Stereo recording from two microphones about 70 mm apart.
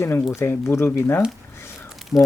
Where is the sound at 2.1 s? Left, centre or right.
Left.